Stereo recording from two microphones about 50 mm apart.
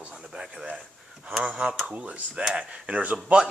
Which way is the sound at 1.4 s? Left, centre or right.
Right.